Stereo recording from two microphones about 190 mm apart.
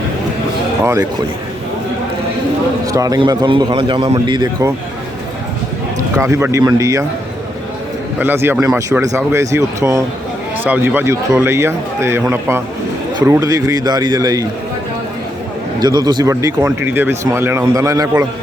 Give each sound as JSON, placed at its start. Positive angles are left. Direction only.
{"t": 2.8, "sound": "a man's voice", "side_deg": -20}
{"t": 6.0, "sound": "speech", "side_deg": -15}
{"t": 8.2, "sound": "a man's voice", "side_deg": -10}
{"t": 15.8, "sound": "speech", "side_deg": -20}